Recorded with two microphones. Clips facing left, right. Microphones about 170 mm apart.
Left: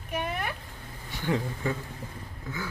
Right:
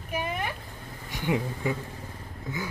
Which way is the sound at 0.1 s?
Centre (ahead or behind).